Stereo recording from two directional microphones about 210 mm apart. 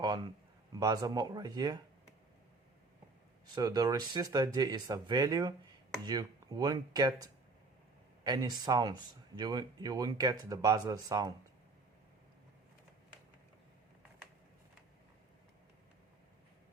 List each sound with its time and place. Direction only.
0.0 s a sound: 20° right (ahead or behind)
0.7 s speech: 20° right (ahead or behind)
3.5 s speech: 20° right (ahead or behind)